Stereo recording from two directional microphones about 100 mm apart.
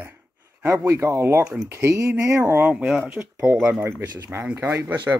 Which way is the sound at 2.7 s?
15° right (ahead or behind).